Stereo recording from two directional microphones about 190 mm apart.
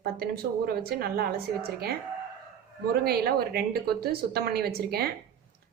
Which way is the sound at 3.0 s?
55° right (ahead or behind).